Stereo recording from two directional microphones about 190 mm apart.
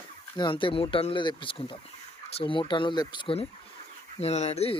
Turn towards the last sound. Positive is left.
turn(degrees=35)  # may be behind; listen again after turning